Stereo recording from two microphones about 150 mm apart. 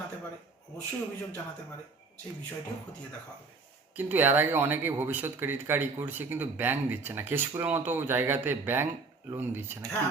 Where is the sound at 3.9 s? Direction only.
10° right (ahead or behind).